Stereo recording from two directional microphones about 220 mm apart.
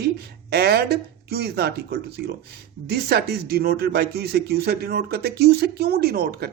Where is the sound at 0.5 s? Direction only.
45° right (ahead or behind).